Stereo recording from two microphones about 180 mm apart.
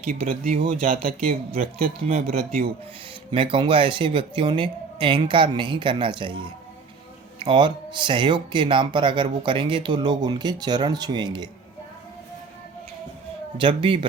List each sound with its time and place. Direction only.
0.3 s a man's voice: 50° right (ahead or behind)
3.3 s speech: 30° right (ahead or behind)
7.3 s speech: 25° right (ahead or behind)
13.6 s speech: 25° right (ahead or behind)